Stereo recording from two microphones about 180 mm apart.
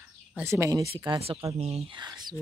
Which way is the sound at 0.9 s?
30° right (ahead or behind).